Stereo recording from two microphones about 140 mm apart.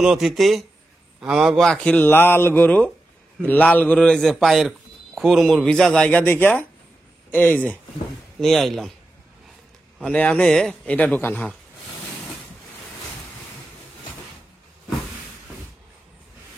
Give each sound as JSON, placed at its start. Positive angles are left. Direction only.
{"t": 0.0, "sound": "a man's voice", "side_deg": -5}
{"t": 9.9, "sound": "speech", "side_deg": 5}